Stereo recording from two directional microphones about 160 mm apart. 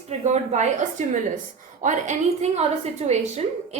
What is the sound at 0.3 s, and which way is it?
A woman's voice, 45° right (ahead or behind).